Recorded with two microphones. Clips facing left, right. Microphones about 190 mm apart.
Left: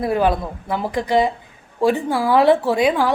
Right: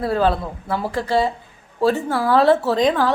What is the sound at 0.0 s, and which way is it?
A woman's voice, 15° left (ahead or behind).